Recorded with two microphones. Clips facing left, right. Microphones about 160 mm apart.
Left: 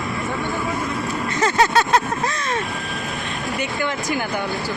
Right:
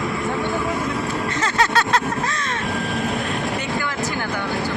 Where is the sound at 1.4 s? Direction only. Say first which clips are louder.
Left 4 dB; 15° left (ahead or behind).